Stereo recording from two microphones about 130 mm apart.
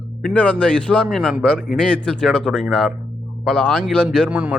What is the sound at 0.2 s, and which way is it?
Speech, 5° left (ahead or behind).